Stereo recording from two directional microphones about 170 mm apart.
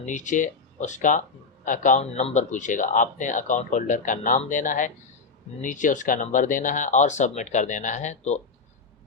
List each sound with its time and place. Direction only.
0.0 s speech: 45° left (ahead or behind)